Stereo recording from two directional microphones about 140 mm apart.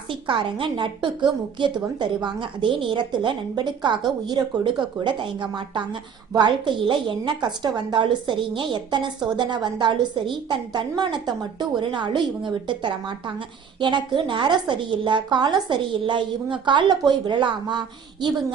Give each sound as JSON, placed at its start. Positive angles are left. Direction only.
{"t": 0.1, "sound": "a woman's voice", "side_deg": -35}